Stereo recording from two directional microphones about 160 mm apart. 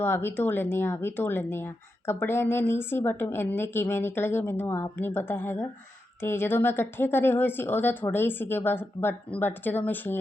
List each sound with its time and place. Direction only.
0.0 s speech: 15° left (ahead or behind)